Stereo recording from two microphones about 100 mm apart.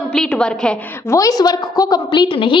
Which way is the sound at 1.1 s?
35° left (ahead or behind).